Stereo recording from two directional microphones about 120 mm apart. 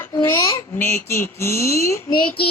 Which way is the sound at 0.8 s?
20° left (ahead or behind).